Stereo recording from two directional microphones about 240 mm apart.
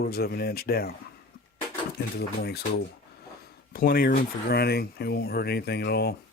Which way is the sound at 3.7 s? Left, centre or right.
Left.